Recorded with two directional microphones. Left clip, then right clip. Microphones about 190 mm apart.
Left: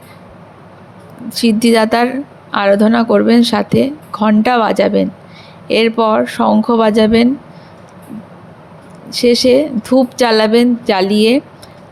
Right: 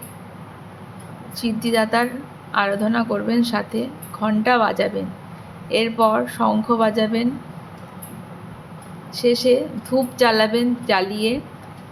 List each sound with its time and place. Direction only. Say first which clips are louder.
1.3 s speech: left 10 dB; 45° left (ahead or behind)
9.0 s speech: left 6 dB; 40° left (ahead or behind)